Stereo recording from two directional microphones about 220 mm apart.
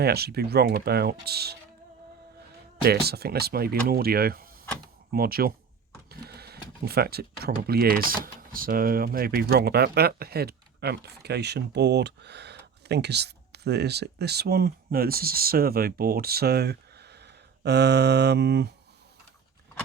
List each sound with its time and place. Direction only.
0.0 s speech: 45° right (ahead or behind)
2.8 s speech: 45° right (ahead or behind)